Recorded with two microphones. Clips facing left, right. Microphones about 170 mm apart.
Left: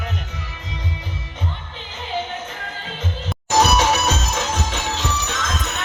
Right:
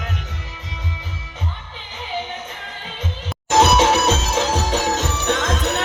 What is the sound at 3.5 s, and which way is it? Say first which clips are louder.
Music: right 2 dB; 25° right (ahead or behind).